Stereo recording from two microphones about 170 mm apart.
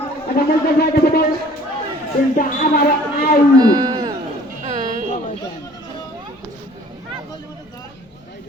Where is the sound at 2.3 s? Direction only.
55° left (ahead or behind).